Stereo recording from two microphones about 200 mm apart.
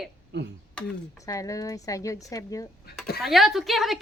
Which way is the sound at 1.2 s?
15° left (ahead or behind).